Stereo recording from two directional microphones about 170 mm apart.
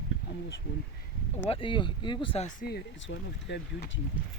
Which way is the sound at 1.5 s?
30° left (ahead or behind).